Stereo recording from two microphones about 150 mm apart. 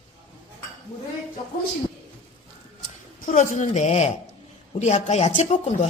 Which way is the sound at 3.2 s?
60° left (ahead or behind).